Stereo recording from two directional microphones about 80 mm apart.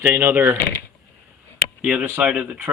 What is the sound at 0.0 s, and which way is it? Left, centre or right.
Speech, right.